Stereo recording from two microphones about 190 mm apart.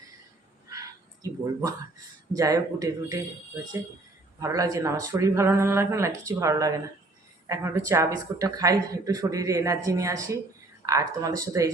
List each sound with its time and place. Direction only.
0.7 s a sound: 20° right (ahead or behind)
2.3 s speech: 20° right (ahead or behind)
4.4 s speech: 15° right (ahead or behind)